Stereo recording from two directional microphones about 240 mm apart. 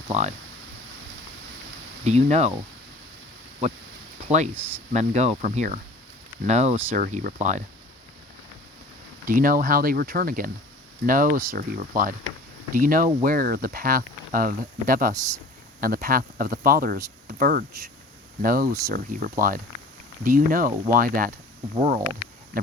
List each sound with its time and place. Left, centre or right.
0.1 s speech: right
2.0 s speech: right
3.6 s speech: right
4.5 s speech: centre
4.9 s speech: right
9.2 s speech: right